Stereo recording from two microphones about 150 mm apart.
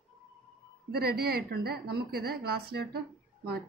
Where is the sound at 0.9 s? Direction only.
90° right.